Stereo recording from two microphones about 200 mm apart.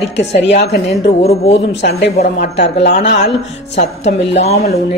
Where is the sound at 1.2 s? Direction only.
30° left (ahead or behind).